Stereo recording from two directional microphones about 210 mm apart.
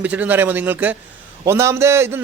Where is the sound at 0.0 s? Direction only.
5° right (ahead or behind).